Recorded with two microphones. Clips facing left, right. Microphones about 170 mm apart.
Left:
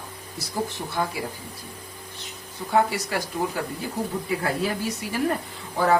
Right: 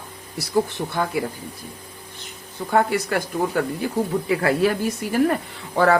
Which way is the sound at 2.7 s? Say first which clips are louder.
Right 3 dB; 55° right (ahead or behind).